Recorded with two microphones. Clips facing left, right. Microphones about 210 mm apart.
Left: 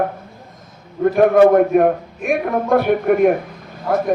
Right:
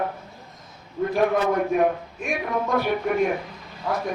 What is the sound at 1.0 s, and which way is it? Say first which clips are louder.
A man's voice: left 10 dB; 55° left (ahead or behind).